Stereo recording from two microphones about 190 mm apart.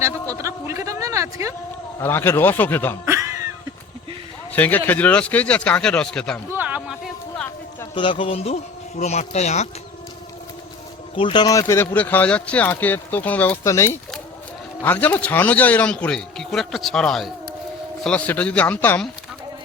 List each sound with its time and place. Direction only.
0.0 s a sound: 15° right (ahead or behind)
2.0 s speech: 10° left (ahead or behind)
4.5 s speech: 10° left (ahead or behind)
6.5 s a sound: 10° right (ahead or behind)
7.9 s speech: 25° left (ahead or behind)
11.2 s speech: 25° left (ahead or behind); by 19.0 s 10° left (ahead or behind)